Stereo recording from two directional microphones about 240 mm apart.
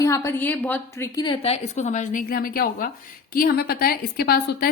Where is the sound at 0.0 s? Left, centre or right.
Centre.